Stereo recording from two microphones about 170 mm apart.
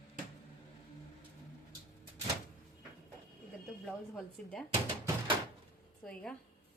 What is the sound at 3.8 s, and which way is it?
Speech, 5° left (ahead or behind).